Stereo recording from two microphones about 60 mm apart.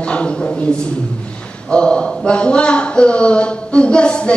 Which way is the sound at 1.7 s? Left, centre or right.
Centre.